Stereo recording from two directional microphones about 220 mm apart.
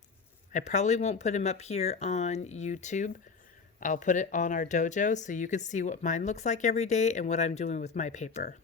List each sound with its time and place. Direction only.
0.5 s speech: 30° left (ahead or behind)